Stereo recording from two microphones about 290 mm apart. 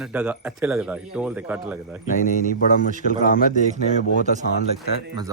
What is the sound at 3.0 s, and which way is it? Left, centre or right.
Speech, left.